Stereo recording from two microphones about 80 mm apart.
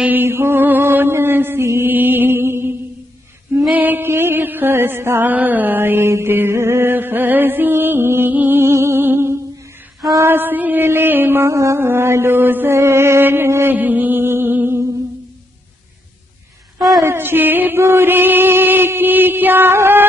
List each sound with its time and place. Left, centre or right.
0.0 s mantra: right
3.7 s music: right
10.2 s mantra: right
17.0 s chant: right